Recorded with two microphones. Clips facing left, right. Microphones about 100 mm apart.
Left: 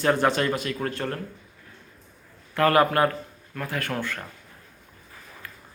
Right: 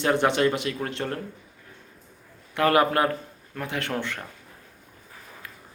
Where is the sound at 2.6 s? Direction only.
20° right (ahead or behind).